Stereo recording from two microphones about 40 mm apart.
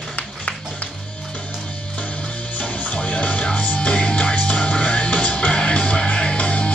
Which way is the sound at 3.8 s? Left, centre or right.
Left.